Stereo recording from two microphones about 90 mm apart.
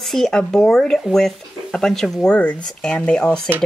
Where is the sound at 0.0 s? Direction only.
5° left (ahead or behind).